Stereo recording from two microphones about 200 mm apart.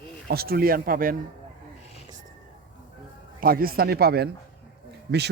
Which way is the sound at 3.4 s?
45° right (ahead or behind).